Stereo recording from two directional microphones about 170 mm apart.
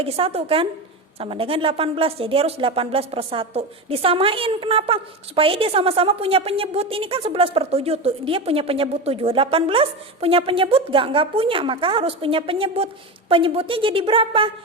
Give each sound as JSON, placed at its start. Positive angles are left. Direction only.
{"t": 0.0, "sound": "speech", "side_deg": -35}